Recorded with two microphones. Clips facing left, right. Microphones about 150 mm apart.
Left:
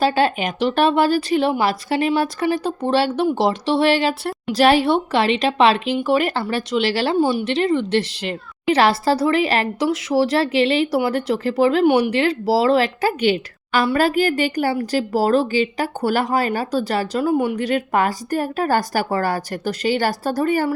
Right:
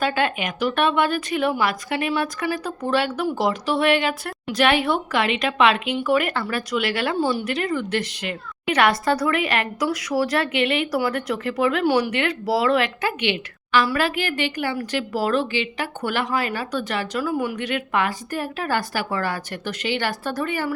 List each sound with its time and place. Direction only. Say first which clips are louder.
0.0 s a woman's voice: left 5 dB; 30° left (ahead or behind)
7.2 s a woman's voice: left 4 dB; 15° left (ahead or behind)
7.4 s a woman's voice: left 5 dB; 25° left (ahead or behind)
11.9 s a woman's voice: left 4 dB; 20° left (ahead or behind)
12.1 s speech: left 5 dB; 30° left (ahead or behind)